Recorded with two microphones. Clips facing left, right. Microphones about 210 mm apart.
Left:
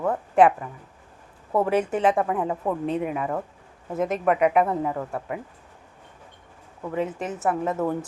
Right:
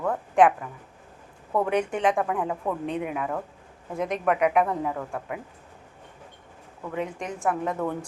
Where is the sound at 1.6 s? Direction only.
5° left (ahead or behind).